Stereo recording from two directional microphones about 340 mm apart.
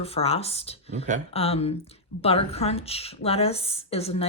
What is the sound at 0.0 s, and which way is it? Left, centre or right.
Speech, centre.